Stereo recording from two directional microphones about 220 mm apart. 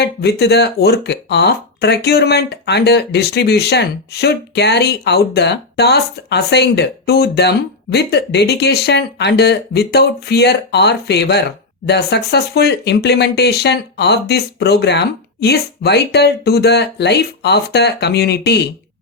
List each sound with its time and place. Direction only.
0.0 s speech: 50° left (ahead or behind)